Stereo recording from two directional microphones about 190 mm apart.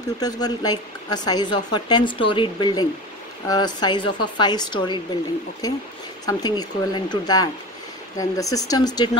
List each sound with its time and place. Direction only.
0.2 s a woman's voice: 20° left (ahead or behind)
6.2 s a woman's voice: 20° left (ahead or behind)